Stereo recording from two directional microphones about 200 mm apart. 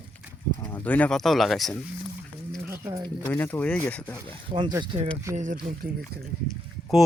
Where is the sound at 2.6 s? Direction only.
15° right (ahead or behind).